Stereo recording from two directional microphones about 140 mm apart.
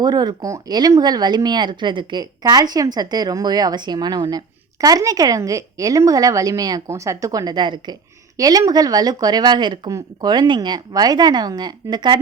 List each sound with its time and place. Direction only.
0.0 s speech: 30° right (ahead or behind)